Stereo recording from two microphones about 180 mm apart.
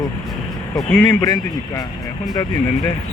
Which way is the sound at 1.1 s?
20° left (ahead or behind).